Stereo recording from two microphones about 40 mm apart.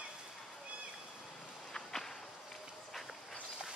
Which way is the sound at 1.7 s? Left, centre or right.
Centre.